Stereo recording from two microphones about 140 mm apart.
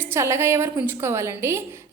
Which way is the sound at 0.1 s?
20° right (ahead or behind).